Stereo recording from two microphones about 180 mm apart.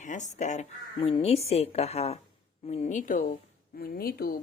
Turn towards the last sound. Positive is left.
turn(degrees=60)  # may be behind; listen again after turning